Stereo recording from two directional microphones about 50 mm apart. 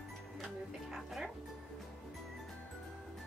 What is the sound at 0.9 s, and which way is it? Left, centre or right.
Speech, centre.